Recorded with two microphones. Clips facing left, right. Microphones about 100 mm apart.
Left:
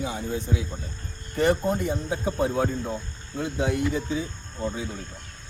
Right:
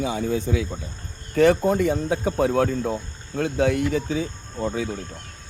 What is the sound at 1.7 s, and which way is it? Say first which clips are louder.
Speech: right 5 dB; 90° right.